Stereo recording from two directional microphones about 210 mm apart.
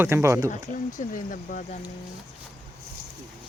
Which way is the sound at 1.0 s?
40° left (ahead or behind).